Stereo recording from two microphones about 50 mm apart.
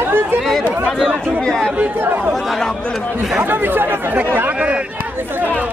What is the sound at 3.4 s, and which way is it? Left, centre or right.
Speech, right.